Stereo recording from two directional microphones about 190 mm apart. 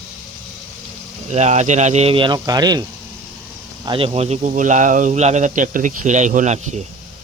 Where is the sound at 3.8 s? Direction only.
30° right (ahead or behind).